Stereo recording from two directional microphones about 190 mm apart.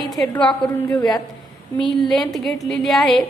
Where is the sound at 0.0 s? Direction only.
Centre (ahead or behind).